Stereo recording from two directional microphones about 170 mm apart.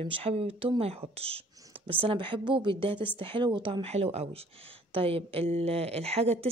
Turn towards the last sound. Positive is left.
turn(degrees=-35)  # may be behind; listen again after turning